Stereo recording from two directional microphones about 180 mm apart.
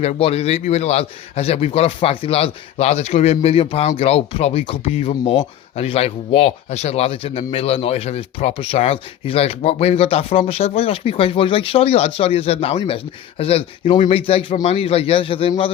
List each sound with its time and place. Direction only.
0.0 s a man's voice: 35° left (ahead or behind)